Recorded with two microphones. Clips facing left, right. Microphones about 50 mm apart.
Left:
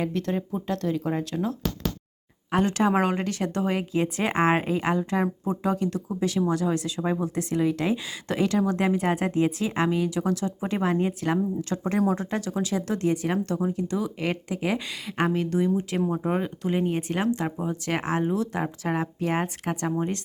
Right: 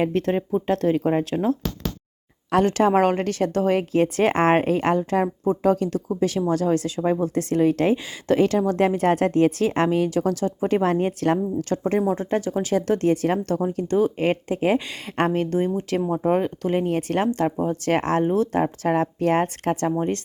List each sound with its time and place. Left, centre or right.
0.0 s speech: right
2.6 s speech: right
7.9 s speech: right
10.8 s speech: right
11.9 s speech: right
12.7 s speech: right
16.0 s speech: centre
16.3 s speech: right